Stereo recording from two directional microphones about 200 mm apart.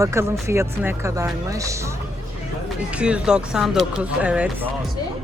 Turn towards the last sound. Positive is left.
turn(degrees=-5)  # may be behind; listen again after turning